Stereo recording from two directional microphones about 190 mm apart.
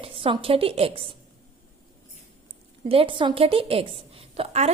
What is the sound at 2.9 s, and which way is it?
A woman's voice, 30° right (ahead or behind).